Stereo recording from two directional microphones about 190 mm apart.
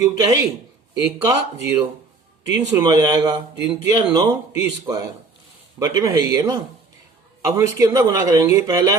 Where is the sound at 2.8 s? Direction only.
20° right (ahead or behind).